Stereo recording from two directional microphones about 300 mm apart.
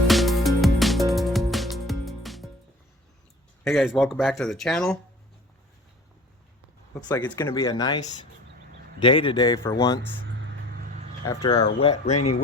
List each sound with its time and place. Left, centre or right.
0.1 s music: centre
3.6 s speech: centre
7.1 s speech: centre
11.3 s speech: centre